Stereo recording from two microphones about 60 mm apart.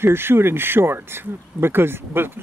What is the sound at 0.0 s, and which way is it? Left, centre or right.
Speech, right.